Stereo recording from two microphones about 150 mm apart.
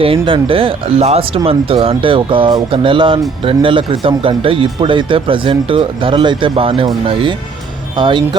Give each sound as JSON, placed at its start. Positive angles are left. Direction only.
{"t": 0.0, "sound": "speech", "side_deg": -40}